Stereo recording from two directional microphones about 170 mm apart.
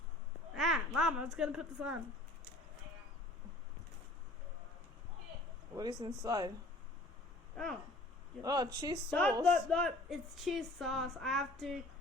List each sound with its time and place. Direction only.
0.5 s a sound: centre (ahead or behind)
0.9 s speech: 5° right (ahead or behind)
5.7 s speech: 25° right (ahead or behind)
7.5 s a sound: 5° left (ahead or behind)
8.4 s speech: 20° right (ahead or behind)
9.4 s speech: 5° left (ahead or behind)